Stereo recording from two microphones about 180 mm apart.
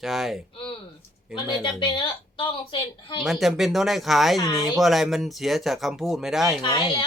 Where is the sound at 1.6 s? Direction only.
25° left (ahead or behind).